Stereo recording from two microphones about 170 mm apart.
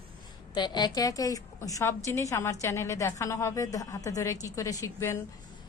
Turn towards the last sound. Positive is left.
turn(degrees=15)  # may be behind; listen again after turning